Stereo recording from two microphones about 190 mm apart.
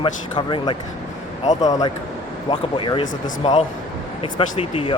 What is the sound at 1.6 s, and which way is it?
Speech, 20° left (ahead or behind).